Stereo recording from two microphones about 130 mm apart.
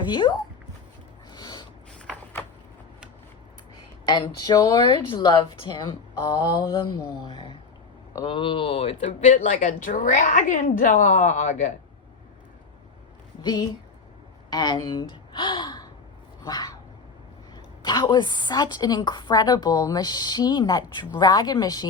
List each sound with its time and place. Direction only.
0.1 s a woman's voice: 35° left (ahead or behind)
1.3 s a sound: 30° left (ahead or behind)
4.0 s a woman's voice: 35° left (ahead or behind); by 11.7 s 70° left (ahead or behind)
13.4 s speech: 35° left (ahead or behind)
16.4 s a sound: 30° left (ahead or behind)
17.5 s a woman's voice: 35° left (ahead or behind)